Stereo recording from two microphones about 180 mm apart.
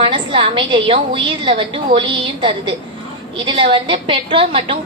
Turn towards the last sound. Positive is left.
turn(degrees=-30)  # may be behind; listen again after turning